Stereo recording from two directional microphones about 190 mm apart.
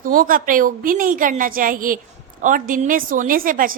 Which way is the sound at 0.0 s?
45° right (ahead or behind).